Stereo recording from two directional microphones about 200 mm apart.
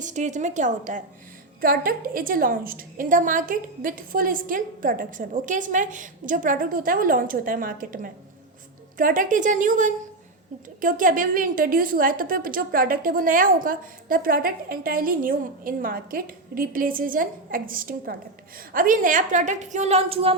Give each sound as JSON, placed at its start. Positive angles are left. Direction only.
{"t": 0.0, "sound": "a woman's voice", "side_deg": -35}